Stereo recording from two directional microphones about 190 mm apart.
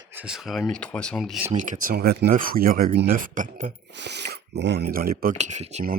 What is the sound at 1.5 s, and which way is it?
Speech, 40° right (ahead or behind).